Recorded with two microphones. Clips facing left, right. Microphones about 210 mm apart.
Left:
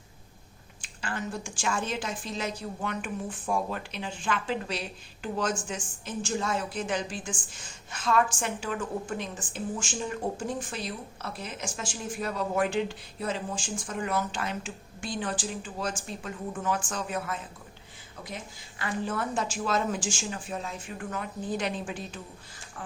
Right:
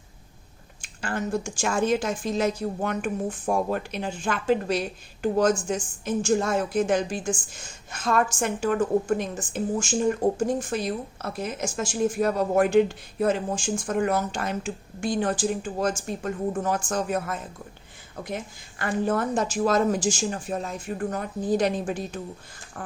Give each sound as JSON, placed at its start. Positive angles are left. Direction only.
{"t": 0.8, "sound": "a woman's voice", "side_deg": -45}